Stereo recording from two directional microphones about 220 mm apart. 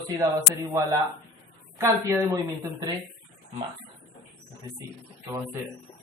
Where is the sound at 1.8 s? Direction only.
15° right (ahead or behind).